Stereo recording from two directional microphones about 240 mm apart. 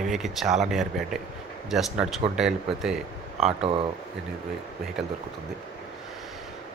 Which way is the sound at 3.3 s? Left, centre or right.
Right.